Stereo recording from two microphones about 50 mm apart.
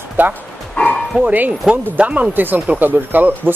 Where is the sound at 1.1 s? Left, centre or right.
Right.